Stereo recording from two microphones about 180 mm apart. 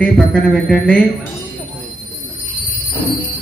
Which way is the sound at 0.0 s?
5° left (ahead or behind).